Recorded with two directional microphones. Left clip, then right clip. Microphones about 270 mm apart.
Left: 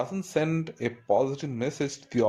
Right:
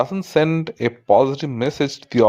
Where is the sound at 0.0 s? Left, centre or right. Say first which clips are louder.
Right 10 dB; right.